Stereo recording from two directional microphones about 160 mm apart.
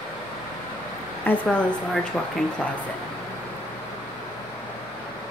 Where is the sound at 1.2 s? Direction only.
10° left (ahead or behind).